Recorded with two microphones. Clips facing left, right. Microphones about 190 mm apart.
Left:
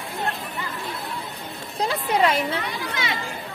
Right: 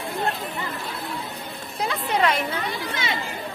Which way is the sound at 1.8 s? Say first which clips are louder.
Left 2 dB; 35° left (ahead or behind).